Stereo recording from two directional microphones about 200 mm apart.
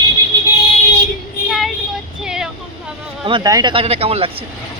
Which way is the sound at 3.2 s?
20° right (ahead or behind).